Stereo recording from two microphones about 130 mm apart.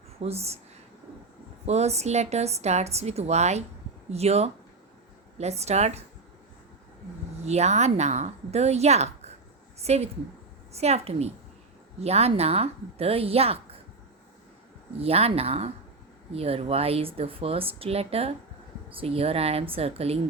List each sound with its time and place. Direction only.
0.2 s speech: 55° right (ahead or behind)
1.6 s a woman's voice: 55° right (ahead or behind)
7.4 s a woman's voice: 60° right (ahead or behind)
14.9 s speech: 50° right (ahead or behind)